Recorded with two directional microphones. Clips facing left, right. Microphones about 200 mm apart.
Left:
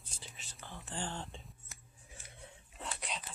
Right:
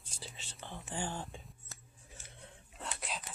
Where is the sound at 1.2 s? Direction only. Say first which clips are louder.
Right 1 dB; centre (ahead or behind).